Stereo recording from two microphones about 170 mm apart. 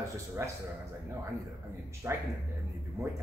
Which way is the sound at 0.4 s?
15° right (ahead or behind).